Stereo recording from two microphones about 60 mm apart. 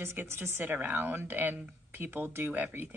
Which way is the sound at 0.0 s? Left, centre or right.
Right.